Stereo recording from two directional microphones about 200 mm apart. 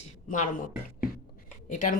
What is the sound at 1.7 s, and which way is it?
Speech, 40° left (ahead or behind).